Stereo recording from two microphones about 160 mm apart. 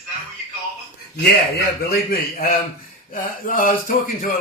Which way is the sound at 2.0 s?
65° left (ahead or behind).